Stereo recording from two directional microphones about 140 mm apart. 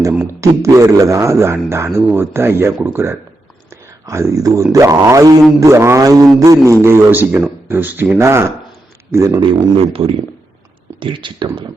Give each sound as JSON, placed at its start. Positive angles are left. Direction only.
{"t": 0.3, "sound": "a man's voice", "side_deg": -20}
{"t": 9.4, "sound": "speech", "side_deg": -40}